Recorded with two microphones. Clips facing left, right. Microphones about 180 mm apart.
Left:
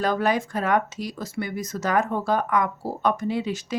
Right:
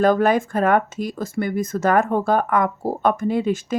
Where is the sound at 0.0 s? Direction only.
50° right (ahead or behind).